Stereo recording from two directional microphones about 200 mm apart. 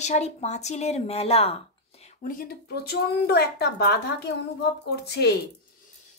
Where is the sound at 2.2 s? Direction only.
45° left (ahead or behind).